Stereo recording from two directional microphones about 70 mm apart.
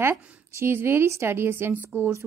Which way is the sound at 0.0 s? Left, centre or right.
Right.